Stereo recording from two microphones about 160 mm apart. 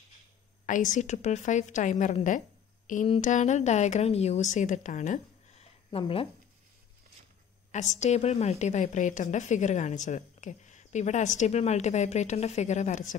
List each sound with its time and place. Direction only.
0.7 s a woman's voice: 50° left (ahead or behind)
5.9 s speech: 35° left (ahead or behind)
7.9 s a woman's voice: 45° left (ahead or behind)